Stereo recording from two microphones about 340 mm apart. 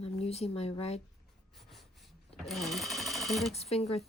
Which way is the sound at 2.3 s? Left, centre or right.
Centre.